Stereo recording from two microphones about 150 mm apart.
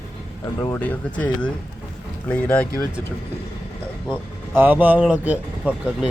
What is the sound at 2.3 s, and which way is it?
Speech, 10° left (ahead or behind).